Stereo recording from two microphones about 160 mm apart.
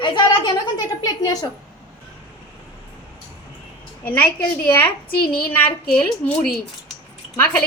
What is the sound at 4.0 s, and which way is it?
A woman's voice, 10° left (ahead or behind).